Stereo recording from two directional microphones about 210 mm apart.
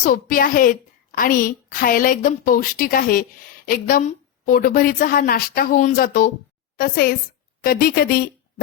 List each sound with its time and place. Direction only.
0.0 s a woman's voice: 40° left (ahead or behind)